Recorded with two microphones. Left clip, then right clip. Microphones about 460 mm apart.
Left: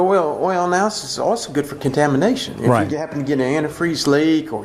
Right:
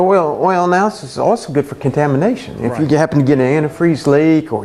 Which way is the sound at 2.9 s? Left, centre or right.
Right.